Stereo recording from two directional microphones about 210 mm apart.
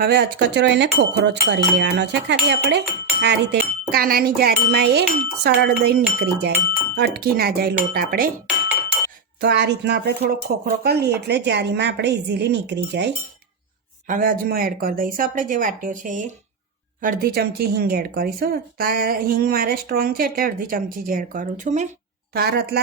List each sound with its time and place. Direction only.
0.0 s speech: 50° right (ahead or behind)
9.4 s speech: 55° right (ahead or behind)
14.1 s speech: 40° right (ahead or behind)
22.3 s speech: 50° right (ahead or behind)